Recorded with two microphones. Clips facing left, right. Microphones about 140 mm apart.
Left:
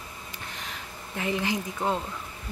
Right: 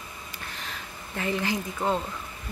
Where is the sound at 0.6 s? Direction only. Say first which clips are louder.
Even; 15° left (ahead or behind).